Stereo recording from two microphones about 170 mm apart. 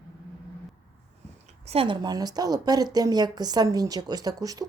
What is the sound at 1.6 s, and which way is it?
Speech, 35° right (ahead or behind).